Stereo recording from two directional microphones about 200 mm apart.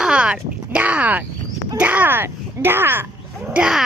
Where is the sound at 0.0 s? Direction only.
5° right (ahead or behind).